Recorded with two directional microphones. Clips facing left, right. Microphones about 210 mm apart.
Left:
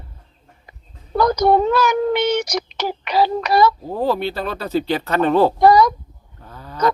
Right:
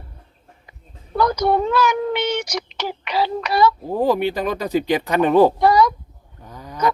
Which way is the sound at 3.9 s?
15° right (ahead or behind).